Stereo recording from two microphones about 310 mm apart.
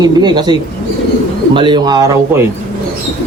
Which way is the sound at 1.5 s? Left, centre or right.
Centre.